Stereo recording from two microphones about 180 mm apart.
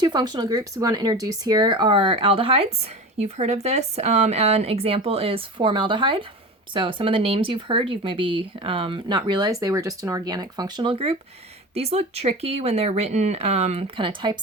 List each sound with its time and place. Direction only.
0.0 s a woman's voice: 25° right (ahead or behind)